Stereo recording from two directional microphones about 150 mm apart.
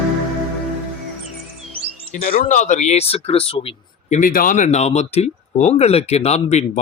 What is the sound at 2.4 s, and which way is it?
Speech, 55° left (ahead or behind).